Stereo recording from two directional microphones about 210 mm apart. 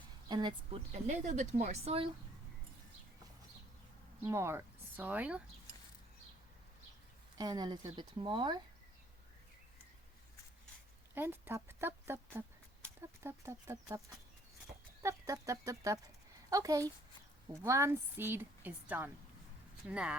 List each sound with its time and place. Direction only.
0.3 s speech: 20° right (ahead or behind)
1.0 s a woman's voice: 35° right (ahead or behind)
4.2 s speech: 15° right (ahead or behind)
7.3 s speech: 20° right (ahead or behind)
11.1 s a woman's voice: 10° right (ahead or behind)
15.0 s a woman's voice: 15° right (ahead or behind)